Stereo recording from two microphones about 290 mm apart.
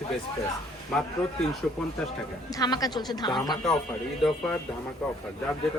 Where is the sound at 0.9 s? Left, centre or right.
Centre.